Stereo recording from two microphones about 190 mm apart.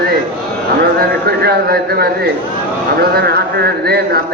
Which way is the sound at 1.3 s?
55° right (ahead or behind).